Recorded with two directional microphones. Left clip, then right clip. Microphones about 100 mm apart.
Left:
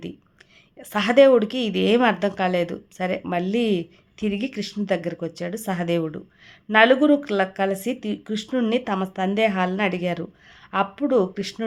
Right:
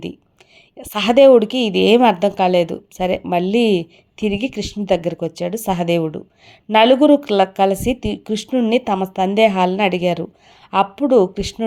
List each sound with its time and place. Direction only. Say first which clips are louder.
0.8 s a woman's voice: right 4 dB; 40° right (ahead or behind)
8.4 s speech: right 5 dB; 25° right (ahead or behind)
8.7 s speech: right 7 dB; 45° right (ahead or behind)